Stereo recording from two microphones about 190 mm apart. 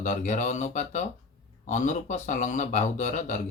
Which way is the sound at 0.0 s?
40° left (ahead or behind).